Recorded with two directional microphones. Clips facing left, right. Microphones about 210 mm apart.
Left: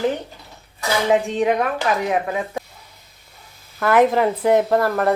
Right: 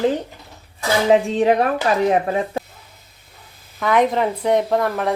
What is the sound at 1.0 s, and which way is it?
Speech, 35° right (ahead or behind).